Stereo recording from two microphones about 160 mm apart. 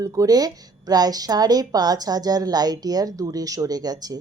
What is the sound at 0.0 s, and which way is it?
Speech, 20° right (ahead or behind).